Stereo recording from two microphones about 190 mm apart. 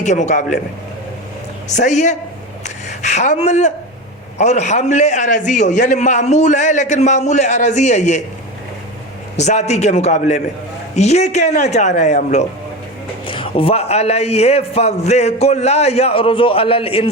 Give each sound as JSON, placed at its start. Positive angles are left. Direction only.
{"t": 0.0, "sound": "a man's voice", "side_deg": 40}
{"t": 1.7, "sound": "a man's voice", "side_deg": 40}
{"t": 9.4, "sound": "a man's voice", "side_deg": 35}